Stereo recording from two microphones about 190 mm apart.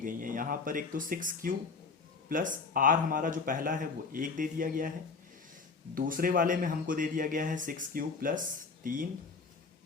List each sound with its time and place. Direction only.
0.0 s speech: 45° right (ahead or behind)
5.9 s speech: 50° right (ahead or behind)